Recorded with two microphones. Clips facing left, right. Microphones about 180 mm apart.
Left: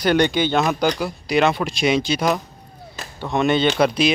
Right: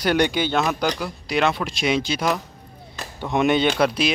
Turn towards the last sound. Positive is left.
turn(degrees=-5)  # may be behind; listen again after turning